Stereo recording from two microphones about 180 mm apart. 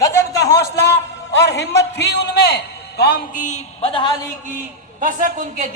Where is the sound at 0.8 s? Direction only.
70° left (ahead or behind).